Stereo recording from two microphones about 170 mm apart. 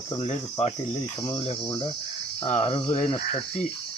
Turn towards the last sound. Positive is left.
turn(degrees=30)  # may be behind; listen again after turning